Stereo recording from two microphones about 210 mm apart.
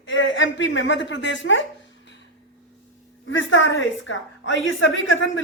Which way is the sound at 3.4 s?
65° left (ahead or behind).